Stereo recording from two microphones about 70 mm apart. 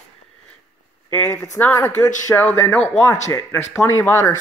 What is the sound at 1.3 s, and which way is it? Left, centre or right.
Speech, left.